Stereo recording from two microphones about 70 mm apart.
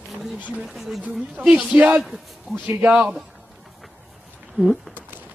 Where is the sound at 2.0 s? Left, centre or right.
Centre.